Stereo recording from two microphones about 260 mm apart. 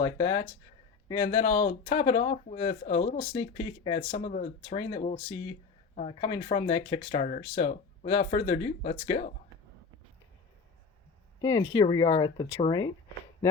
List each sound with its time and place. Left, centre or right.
0.0 s speech: left
11.4 s speech: centre